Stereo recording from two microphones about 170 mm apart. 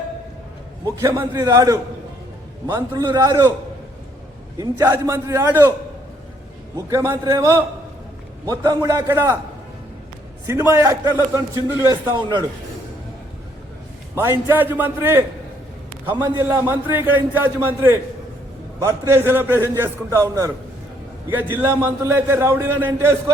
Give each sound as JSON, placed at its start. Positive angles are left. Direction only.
{"t": 0.9, "sound": "a man's voice", "side_deg": -20}
{"t": 4.5, "sound": "a man's voice", "side_deg": -20}
{"t": 6.7, "sound": "a man's voice", "side_deg": -20}
{"t": 10.4, "sound": "a man's voice", "side_deg": -15}
{"t": 14.2, "sound": "a man's voice", "side_deg": -15}
{"t": 16.2, "sound": "a man's voice", "side_deg": -15}